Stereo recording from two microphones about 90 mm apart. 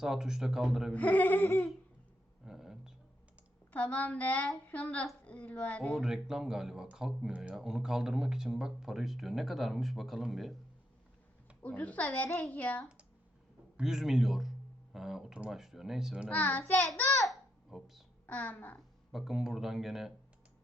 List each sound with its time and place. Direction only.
0.0 s speech: 5° right (ahead or behind)
0.9 s a woman's voice: 15° left (ahead or behind)
2.4 s a sound: 5° right (ahead or behind)
3.7 s a woman's voice: 15° left (ahead or behind)
5.8 s speech: centre (ahead or behind)
11.6 s a woman's voice: 15° left (ahead or behind)
13.7 s speech: 5° right (ahead or behind)
16.3 s a woman's voice: 15° left (ahead or behind)
17.2 s babbling: 5° right (ahead or behind)
18.3 s a woman's voice: 15° left (ahead or behind)
19.1 s speech: 5° right (ahead or behind)